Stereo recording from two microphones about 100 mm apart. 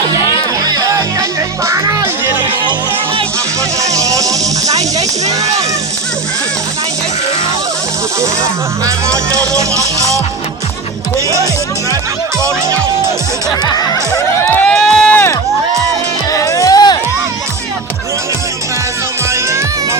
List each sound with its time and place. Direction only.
0.6 s music: 40° right (ahead or behind)
3.8 s music: 35° right (ahead or behind)
9.4 s music: 30° right (ahead or behind)
14.4 s run: 15° left (ahead or behind)
16.3 s music: 35° left (ahead or behind)
19.3 s music: 30° right (ahead or behind)